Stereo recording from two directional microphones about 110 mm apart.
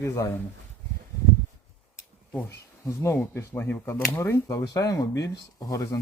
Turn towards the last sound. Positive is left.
turn(degrees=30)  # may be behind; listen again after turning